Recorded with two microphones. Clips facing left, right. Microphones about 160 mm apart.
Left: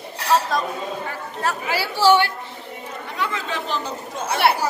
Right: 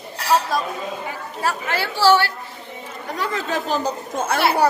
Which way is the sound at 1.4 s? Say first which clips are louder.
Right 1 dB; 5° left (ahead or behind).